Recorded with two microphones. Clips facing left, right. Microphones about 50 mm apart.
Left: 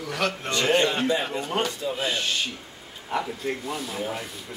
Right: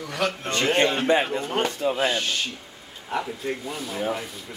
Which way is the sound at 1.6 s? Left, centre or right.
Right.